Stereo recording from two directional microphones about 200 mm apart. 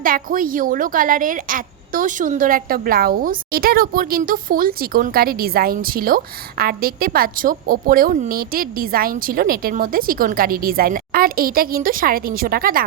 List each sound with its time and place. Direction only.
0.0 s a woman's voice: 45° right (ahead or behind)